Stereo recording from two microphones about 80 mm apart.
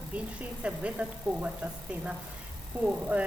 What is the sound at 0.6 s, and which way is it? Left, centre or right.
Speech, centre.